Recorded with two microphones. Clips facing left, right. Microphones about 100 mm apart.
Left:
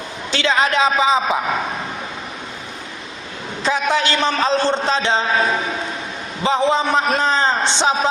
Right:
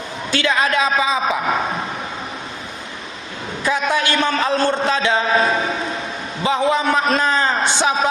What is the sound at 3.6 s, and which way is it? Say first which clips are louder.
A man's voice: left 1 dB; 25° left (ahead or behind).